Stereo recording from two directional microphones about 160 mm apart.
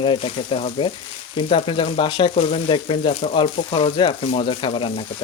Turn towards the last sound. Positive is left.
turn(degrees=35)  # may be behind; listen again after turning